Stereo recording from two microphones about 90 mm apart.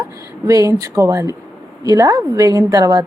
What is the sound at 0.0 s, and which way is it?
A woman's voice, 40° right (ahead or behind).